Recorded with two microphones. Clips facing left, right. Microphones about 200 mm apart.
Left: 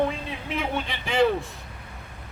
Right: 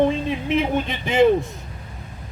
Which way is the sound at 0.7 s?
45° right (ahead or behind).